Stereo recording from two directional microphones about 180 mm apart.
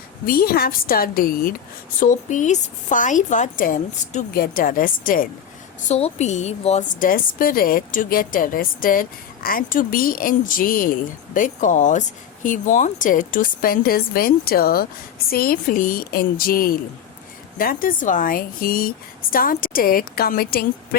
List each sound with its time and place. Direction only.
0.3 s a woman's voice: 55° left (ahead or behind)
5.9 s a woman's voice: 40° left (ahead or behind); by 20.7 s 55° left (ahead or behind)